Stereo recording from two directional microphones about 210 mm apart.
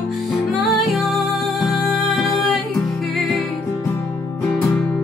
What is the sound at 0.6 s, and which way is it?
Music, centre (ahead or behind).